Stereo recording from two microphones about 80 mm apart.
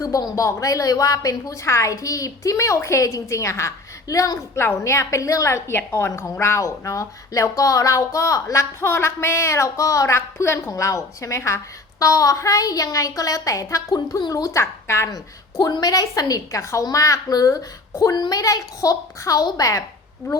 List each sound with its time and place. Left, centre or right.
0.0 s a woman's voice: left
8.8 s a woman's voice: left
13.9 s a woman's voice: left
14.5 s a woman's voice: left
15.5 s a woman's voice: left
18.1 s a woman's voice: left